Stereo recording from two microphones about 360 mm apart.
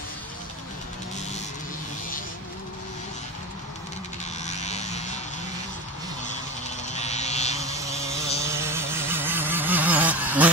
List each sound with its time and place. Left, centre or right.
4.5 s vehicle: centre
6.9 s vehicle: centre
7.6 s insect: centre
8.4 s vehicle: centre